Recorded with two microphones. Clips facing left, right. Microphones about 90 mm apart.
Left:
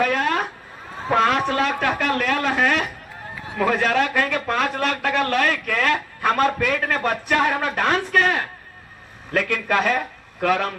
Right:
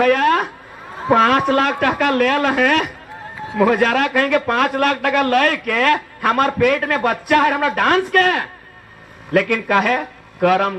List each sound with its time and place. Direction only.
0.0 s a sound: 55° right (ahead or behind)
1.1 s a man's voice: 55° right (ahead or behind)
3.6 s speech: 40° right (ahead or behind)
3.8 s a man's voice: 55° right (ahead or behind)